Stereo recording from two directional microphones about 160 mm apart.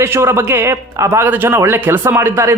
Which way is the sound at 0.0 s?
15° right (ahead or behind).